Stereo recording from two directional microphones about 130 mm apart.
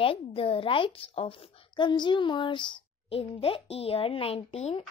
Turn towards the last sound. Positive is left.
turn(degrees=50)  # may be behind; listen again after turning